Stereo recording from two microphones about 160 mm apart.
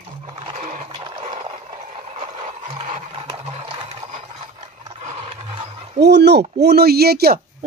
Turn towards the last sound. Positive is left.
turn(degrees=-75)  # may be behind; listen again after turning